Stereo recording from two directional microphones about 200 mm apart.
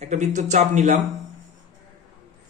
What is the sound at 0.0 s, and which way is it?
Speech, 35° right (ahead or behind).